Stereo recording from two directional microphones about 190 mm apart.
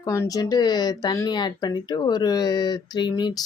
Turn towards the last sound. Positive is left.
turn(degrees=25)  # may be behind; listen again after turning